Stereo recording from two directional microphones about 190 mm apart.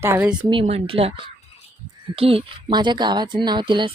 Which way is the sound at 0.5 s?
30° right (ahead or behind).